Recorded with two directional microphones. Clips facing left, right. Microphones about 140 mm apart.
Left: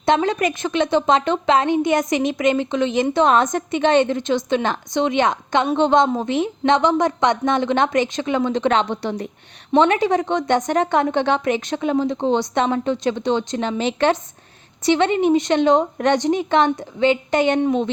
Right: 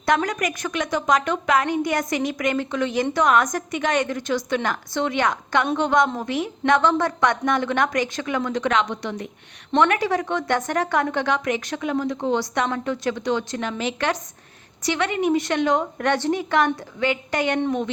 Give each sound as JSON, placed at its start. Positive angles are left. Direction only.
{"t": 0.0, "sound": "a woman's voice", "side_deg": 25}
{"t": 9.7, "sound": "a woman's voice", "side_deg": 20}